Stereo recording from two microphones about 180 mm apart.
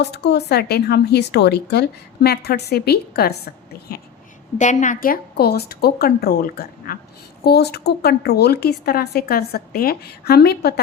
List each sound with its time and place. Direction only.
0.0 s speech: 70° left (ahead or behind)
4.5 s speech: 45° left (ahead or behind); by 10.8 s 60° left (ahead or behind)